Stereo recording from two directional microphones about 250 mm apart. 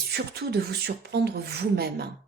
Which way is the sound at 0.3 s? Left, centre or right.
Right.